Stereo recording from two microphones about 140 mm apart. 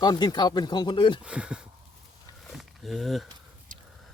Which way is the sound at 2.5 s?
Centre (ahead or behind).